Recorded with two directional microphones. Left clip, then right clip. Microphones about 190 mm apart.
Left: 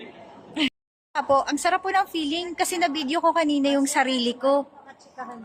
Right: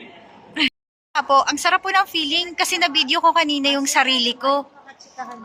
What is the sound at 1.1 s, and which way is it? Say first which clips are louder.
A woman's voice: right 5 dB; 25° left (ahead or behind).